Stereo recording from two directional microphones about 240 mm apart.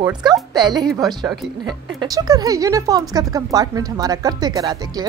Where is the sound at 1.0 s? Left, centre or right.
Centre.